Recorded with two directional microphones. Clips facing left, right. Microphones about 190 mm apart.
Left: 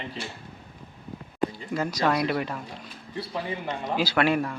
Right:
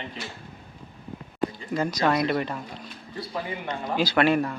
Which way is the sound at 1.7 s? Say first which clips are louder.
Right 2 dB; 5° left (ahead or behind).